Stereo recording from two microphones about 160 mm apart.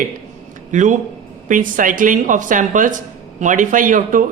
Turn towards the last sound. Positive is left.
turn(degrees=-55)  # may be behind; listen again after turning